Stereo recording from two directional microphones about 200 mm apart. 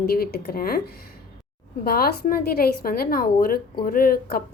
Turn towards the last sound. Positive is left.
turn(degrees=45)  # may be behind; listen again after turning